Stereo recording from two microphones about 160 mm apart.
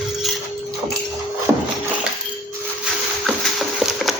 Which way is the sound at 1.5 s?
15° right (ahead or behind).